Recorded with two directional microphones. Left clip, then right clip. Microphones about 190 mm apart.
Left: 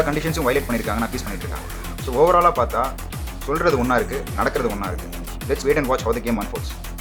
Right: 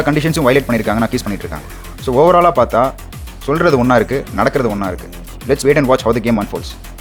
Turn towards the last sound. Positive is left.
turn(degrees=-40)  # may be behind; listen again after turning